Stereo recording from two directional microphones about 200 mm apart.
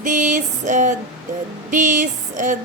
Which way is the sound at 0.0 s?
40° right (ahead or behind).